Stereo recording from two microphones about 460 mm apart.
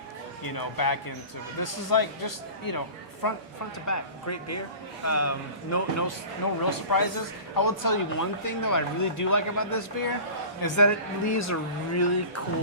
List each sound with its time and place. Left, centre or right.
0.4 s speech: left
3.8 s speech: left